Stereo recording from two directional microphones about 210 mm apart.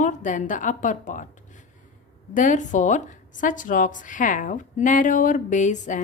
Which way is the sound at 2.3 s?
35° left (ahead or behind).